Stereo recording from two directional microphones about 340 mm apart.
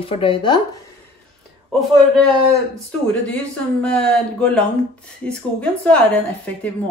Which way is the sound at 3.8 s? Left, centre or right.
Centre.